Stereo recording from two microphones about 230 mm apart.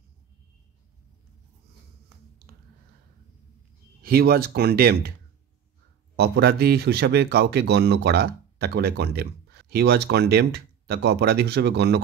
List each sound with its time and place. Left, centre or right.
4.0 s speech: right
6.1 s speech: right